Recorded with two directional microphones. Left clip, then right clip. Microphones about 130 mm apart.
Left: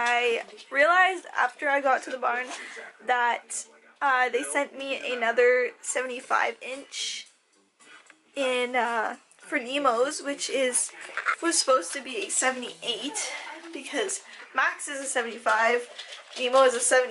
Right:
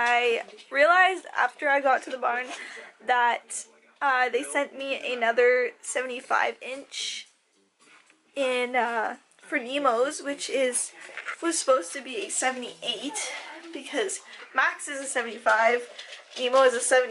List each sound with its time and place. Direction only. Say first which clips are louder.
0.0 s speech: right 1 dB; centre (ahead or behind)
8.4 s speech: even; centre (ahead or behind)